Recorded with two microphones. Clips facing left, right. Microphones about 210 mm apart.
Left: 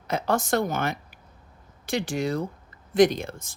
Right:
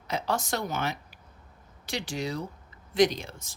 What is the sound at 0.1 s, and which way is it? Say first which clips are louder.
Speech: left 5 dB; 50° left (ahead or behind).